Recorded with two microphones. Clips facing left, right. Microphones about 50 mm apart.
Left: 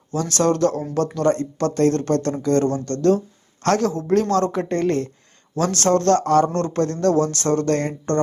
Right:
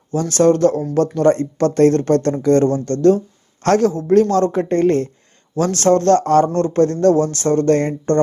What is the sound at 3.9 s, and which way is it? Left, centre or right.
Speech, centre.